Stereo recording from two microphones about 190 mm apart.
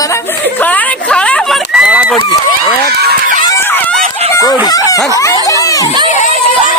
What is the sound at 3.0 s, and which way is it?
Fowl, 50° right (ahead or behind).